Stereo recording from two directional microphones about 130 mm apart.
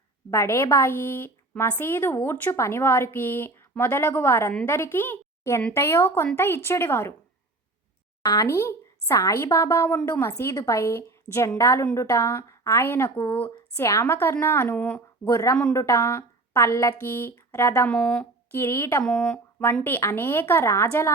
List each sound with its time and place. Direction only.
0.3 s a woman's voice: 20° left (ahead or behind)
8.2 s a woman's voice: 25° left (ahead or behind); by 15.3 s 10° left (ahead or behind)
15.3 s a woman's voice: 25° left (ahead or behind)
17.8 s speech: 10° left (ahead or behind)
19.0 s speech: 5° left (ahead or behind)
19.8 s speech: 20° left (ahead or behind)